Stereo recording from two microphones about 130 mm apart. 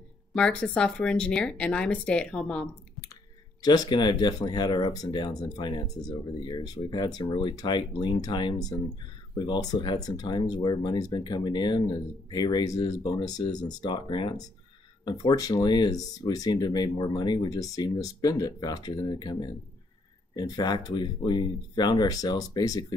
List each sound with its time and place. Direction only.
0.3 s speech: 10° left (ahead or behind)
3.6 s speech: 30° left (ahead or behind)